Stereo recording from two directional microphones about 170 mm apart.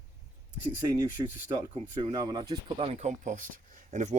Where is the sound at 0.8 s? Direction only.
20° right (ahead or behind).